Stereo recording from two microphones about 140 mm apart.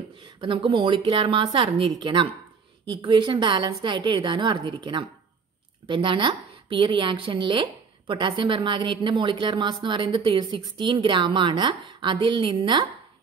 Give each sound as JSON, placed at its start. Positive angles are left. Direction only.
{"t": 0.2, "sound": "a woman's voice", "side_deg": -35}